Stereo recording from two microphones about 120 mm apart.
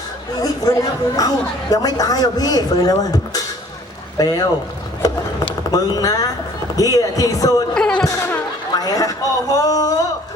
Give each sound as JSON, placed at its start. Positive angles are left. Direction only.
{"t": 0.4, "sound": "speech", "side_deg": 30}
{"t": 7.7, "sound": "music", "side_deg": 5}
{"t": 8.7, "sound": "speech", "side_deg": 30}